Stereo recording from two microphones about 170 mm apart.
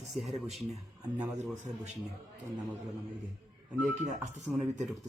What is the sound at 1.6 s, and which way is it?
Speech, 45° right (ahead or behind).